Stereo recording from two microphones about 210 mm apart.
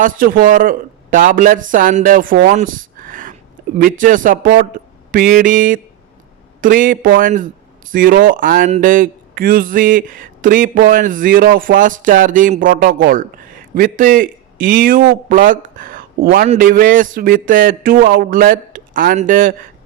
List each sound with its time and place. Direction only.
0.0 s a man's voice: 40° right (ahead or behind)